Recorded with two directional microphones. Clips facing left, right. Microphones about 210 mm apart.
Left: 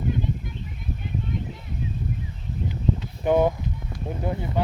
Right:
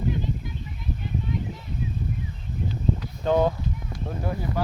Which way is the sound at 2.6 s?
15° left (ahead or behind).